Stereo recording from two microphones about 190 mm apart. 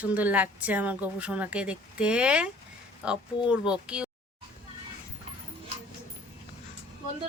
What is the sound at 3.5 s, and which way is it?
Speech, 5° right (ahead or behind).